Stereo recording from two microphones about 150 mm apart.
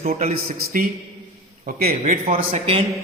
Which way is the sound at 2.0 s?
70° right (ahead or behind).